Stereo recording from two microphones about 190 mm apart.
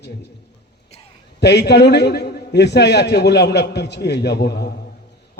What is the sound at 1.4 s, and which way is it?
A man's voice, 60° left (ahead or behind).